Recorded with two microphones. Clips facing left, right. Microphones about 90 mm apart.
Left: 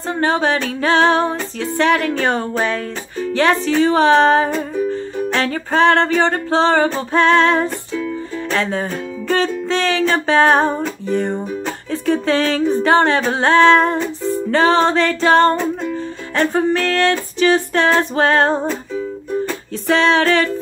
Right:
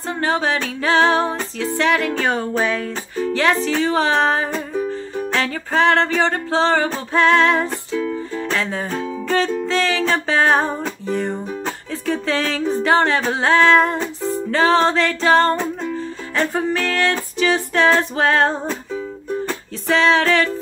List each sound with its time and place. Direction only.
0.2 s music: centre (ahead or behind)
19.9 s music: centre (ahead or behind)